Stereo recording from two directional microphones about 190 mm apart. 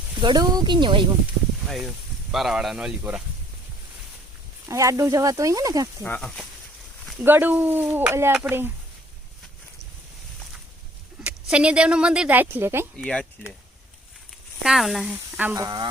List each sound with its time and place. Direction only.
0.2 s speech: 20° right (ahead or behind)
1.6 s speech: centre (ahead or behind)
4.7 s speech: 15° right (ahead or behind)
6.0 s speech: 5° left (ahead or behind)
7.3 s speech: 10° right (ahead or behind)
11.2 s speech: 5° right (ahead or behind)
13.0 s speech: 5° left (ahead or behind)
14.6 s speech: centre (ahead or behind); by 15.9 s 20° right (ahead or behind)